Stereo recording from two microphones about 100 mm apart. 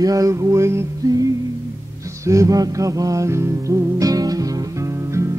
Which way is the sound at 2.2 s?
30° right (ahead or behind).